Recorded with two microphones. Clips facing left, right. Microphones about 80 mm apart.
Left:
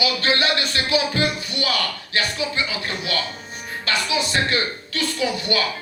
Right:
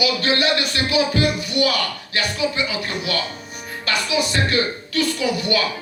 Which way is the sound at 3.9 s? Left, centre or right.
Left.